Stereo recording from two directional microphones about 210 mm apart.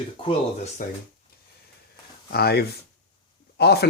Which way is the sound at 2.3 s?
50° left (ahead or behind).